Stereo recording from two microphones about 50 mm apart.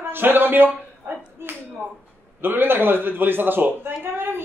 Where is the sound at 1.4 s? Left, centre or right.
Right.